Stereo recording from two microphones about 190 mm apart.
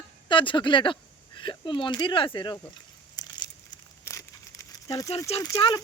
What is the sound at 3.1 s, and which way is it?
Crumpling, 20° left (ahead or behind).